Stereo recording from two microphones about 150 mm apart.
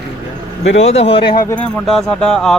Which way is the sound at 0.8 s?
45° left (ahead or behind).